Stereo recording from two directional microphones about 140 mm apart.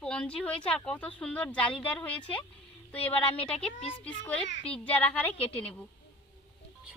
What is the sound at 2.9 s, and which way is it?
Speech, 45° left (ahead or behind).